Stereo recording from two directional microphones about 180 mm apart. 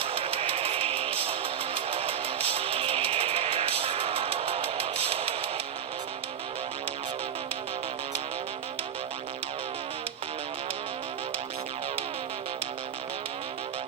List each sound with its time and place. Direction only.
0.0 s music: 30° right (ahead or behind)